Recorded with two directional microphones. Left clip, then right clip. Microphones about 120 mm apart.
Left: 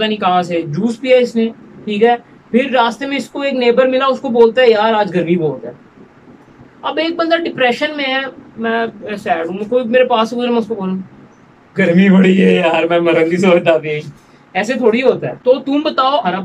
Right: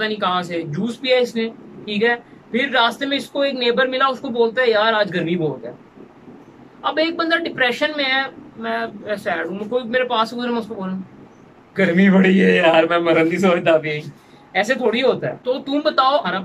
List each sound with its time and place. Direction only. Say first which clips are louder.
0.0 s speech: left 6 dB; 15° left (ahead or behind)
6.8 s speech: left 3 dB; 10° left (ahead or behind)
11.7 s a man's voice: left 4 dB; 10° left (ahead or behind)
15.4 s speech: left 8 dB; 20° left (ahead or behind)